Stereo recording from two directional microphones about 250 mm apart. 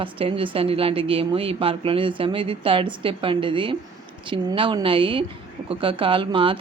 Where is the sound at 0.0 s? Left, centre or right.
Right.